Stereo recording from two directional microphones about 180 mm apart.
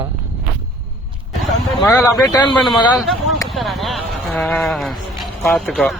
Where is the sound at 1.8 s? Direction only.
15° left (ahead or behind).